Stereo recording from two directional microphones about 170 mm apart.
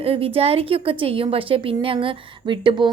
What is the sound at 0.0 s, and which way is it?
A woman's voice, 35° right (ahead or behind).